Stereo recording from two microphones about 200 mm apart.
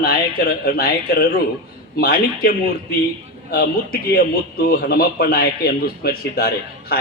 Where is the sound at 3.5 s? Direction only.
50° left (ahead or behind).